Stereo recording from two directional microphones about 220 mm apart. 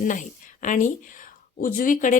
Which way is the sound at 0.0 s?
35° left (ahead or behind).